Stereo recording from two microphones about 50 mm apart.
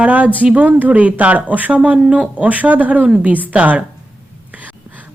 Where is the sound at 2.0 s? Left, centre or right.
Centre.